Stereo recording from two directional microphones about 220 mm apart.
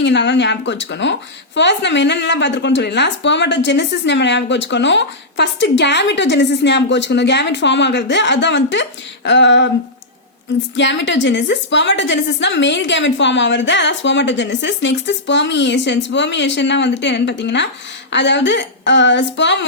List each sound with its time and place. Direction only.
0.0 s speech: 50° left (ahead or behind)
10.8 s speech: 55° left (ahead or behind)